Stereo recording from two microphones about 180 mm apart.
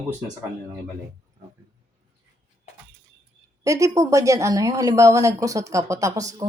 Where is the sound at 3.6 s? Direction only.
20° right (ahead or behind).